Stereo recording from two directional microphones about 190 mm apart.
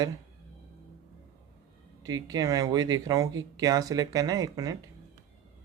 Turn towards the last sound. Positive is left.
turn(degrees=-20)  # may be behind; listen again after turning